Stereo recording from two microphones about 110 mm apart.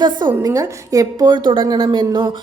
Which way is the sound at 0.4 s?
35° right (ahead or behind).